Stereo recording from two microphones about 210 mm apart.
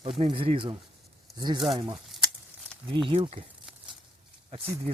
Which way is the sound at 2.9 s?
25° right (ahead or behind).